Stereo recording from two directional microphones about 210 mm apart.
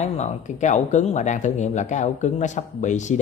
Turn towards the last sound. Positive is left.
turn(degrees=35)  # may be behind; listen again after turning